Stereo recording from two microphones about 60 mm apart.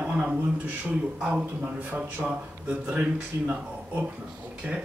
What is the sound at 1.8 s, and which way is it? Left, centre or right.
Speech, right.